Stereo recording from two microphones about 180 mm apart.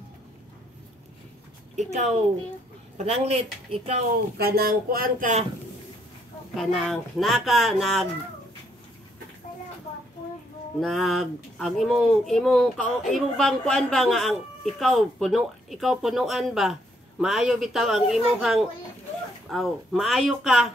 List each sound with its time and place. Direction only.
1.8 s speech: 40° right (ahead or behind)
4.4 s speech: 55° right (ahead or behind)
6.5 s speech: centre (ahead or behind)
10.8 s speech: centre (ahead or behind)